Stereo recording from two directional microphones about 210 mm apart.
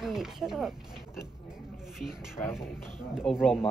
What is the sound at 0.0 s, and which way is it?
Speech, centre (ahead or behind).